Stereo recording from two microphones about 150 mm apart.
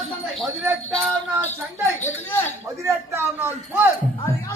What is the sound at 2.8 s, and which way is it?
A man's voice, 15° right (ahead or behind).